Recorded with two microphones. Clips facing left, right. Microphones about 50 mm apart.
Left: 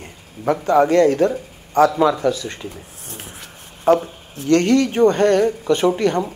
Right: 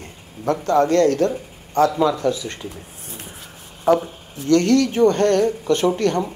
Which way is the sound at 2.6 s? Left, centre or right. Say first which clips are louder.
Left 1 dB; left.